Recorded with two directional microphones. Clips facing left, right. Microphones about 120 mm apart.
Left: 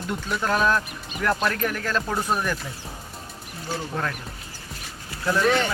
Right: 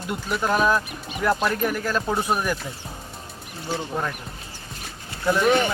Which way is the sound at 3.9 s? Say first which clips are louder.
Even; 10° right (ahead or behind).